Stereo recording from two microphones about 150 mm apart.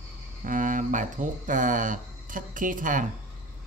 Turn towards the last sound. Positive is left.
turn(degrees=-65)  # may be behind; listen again after turning